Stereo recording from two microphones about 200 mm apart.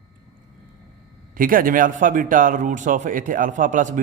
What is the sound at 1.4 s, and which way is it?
A man's voice, 45° right (ahead or behind).